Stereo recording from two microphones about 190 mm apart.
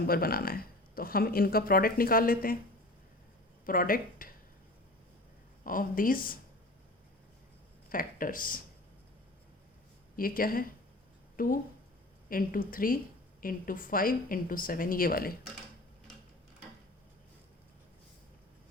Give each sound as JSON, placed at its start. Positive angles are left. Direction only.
{"t": 0.1, "sound": "speech", "side_deg": 50}
{"t": 3.7, "sound": "speech", "side_deg": 50}
{"t": 5.6, "sound": "speech", "side_deg": 45}
{"t": 7.9, "sound": "speech", "side_deg": 45}
{"t": 10.2, "sound": "speech", "side_deg": 50}